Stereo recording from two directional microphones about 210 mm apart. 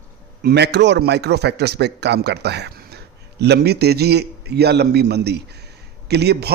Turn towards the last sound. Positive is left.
turn(degrees=-50)  # may be behind; listen again after turning